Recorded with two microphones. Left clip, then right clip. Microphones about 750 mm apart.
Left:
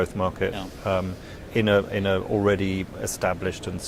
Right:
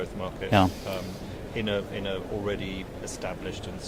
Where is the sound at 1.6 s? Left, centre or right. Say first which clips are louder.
Left 9 dB; left.